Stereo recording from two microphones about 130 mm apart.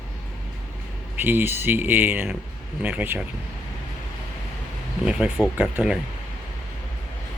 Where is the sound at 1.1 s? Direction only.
15° right (ahead or behind).